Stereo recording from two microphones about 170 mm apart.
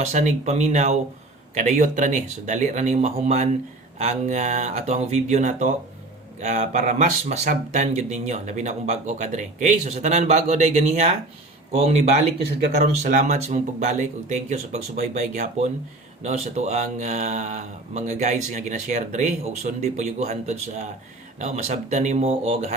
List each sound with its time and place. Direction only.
0.0 s speech: 45° right (ahead or behind)